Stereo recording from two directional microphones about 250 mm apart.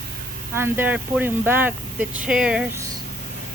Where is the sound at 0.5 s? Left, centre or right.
Centre.